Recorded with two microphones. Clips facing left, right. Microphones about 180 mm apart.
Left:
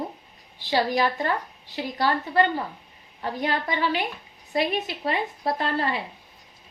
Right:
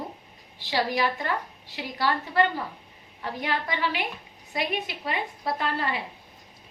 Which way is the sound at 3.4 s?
30° left (ahead or behind).